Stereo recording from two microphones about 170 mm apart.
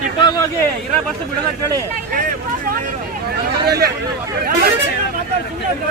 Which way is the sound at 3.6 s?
65° right (ahead or behind).